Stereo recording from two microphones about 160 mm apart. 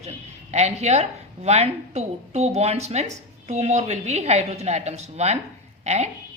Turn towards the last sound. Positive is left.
turn(degrees=-45)  # may be behind; listen again after turning